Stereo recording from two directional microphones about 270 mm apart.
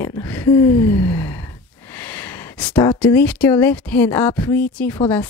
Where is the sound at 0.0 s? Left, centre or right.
Centre.